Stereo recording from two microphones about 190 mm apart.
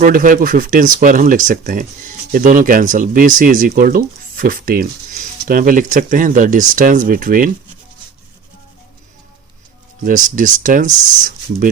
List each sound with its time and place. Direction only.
0.0 s speech: 45° right (ahead or behind)
10.0 s speech: 45° right (ahead or behind)